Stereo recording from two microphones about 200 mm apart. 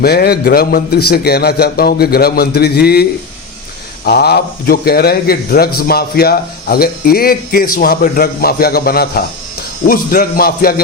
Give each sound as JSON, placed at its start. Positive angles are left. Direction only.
{"t": 0.0, "sound": "speech", "side_deg": 50}